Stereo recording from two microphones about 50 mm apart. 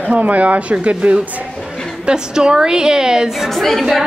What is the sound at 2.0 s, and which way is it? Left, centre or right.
A woman's voice, centre.